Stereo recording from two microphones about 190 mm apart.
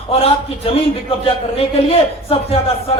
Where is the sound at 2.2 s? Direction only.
30° left (ahead or behind).